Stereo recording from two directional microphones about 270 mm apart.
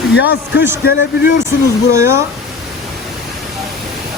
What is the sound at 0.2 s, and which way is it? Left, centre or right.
Speech, left.